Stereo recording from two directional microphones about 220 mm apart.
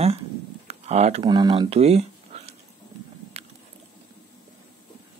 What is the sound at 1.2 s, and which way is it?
Speech, 20° right (ahead or behind).